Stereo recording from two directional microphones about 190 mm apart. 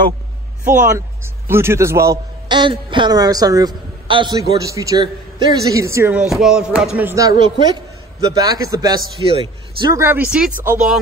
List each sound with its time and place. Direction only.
0.7 s a man's voice: 15° right (ahead or behind)